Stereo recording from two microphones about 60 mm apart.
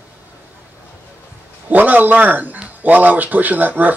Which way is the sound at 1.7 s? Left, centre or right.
Right.